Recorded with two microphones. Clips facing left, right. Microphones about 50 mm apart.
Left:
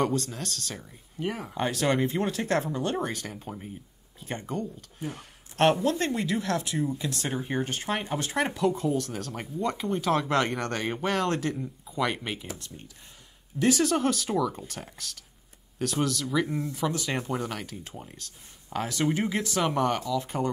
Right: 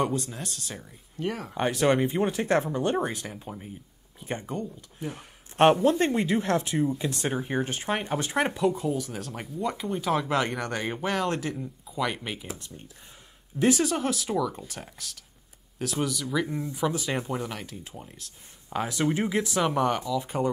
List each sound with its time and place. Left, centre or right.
0.0 s speech: centre
1.2 s speech: centre
1.6 s speech: right
3.3 s speech: centre
4.2 s speech: centre
5.9 s speech: right; by 12.4 s centre
12.4 s speech: right
13.8 s speech: centre